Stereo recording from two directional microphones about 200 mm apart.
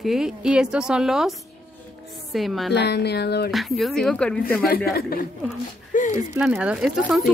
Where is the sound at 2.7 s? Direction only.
55° left (ahead or behind).